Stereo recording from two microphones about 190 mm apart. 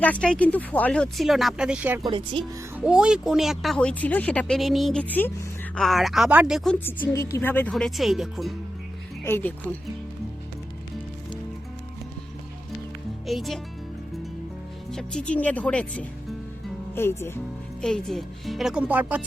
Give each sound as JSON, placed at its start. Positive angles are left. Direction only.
{"t": 0.0, "sound": "speech", "side_deg": 5}
{"t": 2.0, "sound": "speech", "side_deg": -25}
{"t": 2.7, "sound": "speech", "side_deg": -5}
{"t": 6.7, "sound": "speech", "side_deg": 10}
{"t": 9.2, "sound": "speech", "side_deg": 10}
{"t": 13.2, "sound": "speech", "side_deg": 0}
{"t": 14.8, "sound": "speech", "side_deg": 5}